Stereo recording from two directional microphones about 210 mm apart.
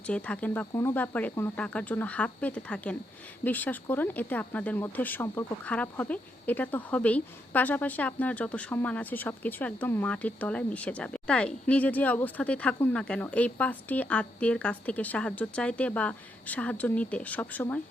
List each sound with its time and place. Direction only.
0.1 s speech: 5° left (ahead or behind)